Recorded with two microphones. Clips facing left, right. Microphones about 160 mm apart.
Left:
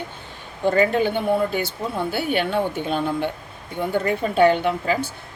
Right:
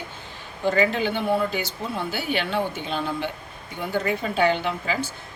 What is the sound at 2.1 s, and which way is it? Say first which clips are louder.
Speech: left 4 dB; 55° left (ahead or behind).